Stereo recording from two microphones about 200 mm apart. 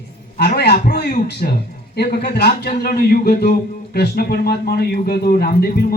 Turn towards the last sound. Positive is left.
turn(degrees=50)  # may be behind; listen again after turning